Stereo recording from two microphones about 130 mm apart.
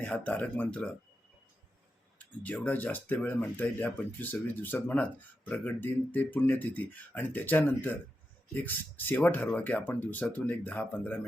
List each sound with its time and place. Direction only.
0.0 s speech: 10° left (ahead or behind)
2.4 s speech: 10° left (ahead or behind)